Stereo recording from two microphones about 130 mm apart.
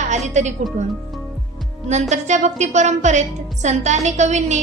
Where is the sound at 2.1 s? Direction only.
65° right (ahead or behind).